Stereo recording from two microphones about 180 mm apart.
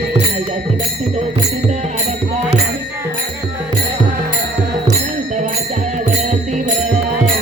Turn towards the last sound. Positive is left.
turn(degrees=-40)  # may be behind; listen again after turning